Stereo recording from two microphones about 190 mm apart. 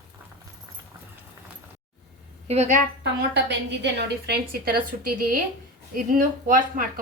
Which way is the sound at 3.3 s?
65° right (ahead or behind).